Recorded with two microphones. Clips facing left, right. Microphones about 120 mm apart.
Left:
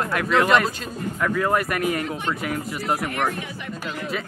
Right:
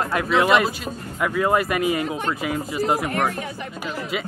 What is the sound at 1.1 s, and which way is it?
Speech, 15° right (ahead or behind).